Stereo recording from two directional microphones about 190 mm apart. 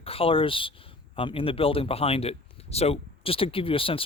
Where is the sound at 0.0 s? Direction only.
30° left (ahead or behind).